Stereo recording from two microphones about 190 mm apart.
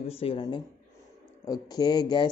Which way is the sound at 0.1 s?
30° left (ahead or behind).